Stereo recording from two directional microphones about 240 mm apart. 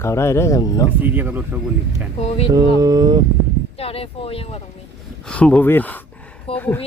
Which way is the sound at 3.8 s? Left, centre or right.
Left.